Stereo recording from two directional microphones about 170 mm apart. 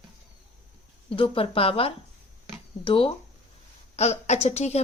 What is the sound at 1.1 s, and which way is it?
A woman's voice, 30° left (ahead or behind).